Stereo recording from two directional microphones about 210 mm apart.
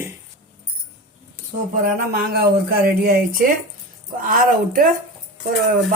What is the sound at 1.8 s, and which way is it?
Speech, 45° right (ahead or behind).